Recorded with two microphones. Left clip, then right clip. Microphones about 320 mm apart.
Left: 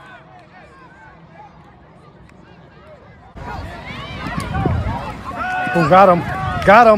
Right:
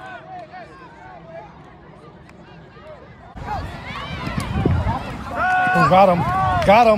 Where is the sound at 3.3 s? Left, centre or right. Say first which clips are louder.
Right 2 dB; centre.